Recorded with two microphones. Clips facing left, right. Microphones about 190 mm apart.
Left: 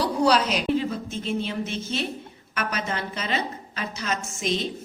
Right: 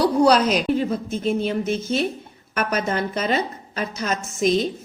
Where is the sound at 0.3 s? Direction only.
45° right (ahead or behind).